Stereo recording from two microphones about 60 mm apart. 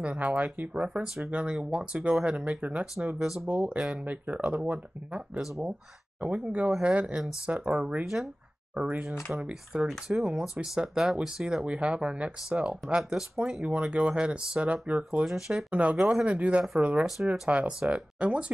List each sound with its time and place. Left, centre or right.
0.0 s speech: right
0.8 s speech: centre
15.2 s speech: centre
15.7 s speech: right
16.0 s speech: centre
16.3 s speech: right